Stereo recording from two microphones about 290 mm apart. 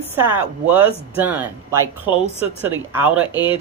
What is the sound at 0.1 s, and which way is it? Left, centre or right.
Speech, centre.